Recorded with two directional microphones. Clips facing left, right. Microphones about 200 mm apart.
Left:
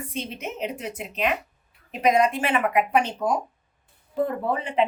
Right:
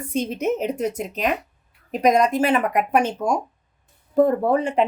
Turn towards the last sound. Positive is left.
turn(degrees=-45)  # may be behind; listen again after turning